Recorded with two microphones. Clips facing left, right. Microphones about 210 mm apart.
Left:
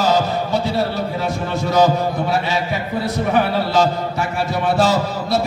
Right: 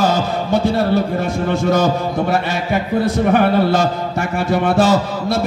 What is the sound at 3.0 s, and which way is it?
A man's voice, 55° right (ahead or behind).